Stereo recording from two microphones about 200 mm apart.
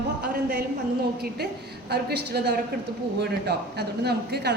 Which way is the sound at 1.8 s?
55° right (ahead or behind).